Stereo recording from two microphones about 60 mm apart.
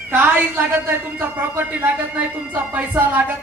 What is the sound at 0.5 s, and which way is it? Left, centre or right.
A woman's voice, right.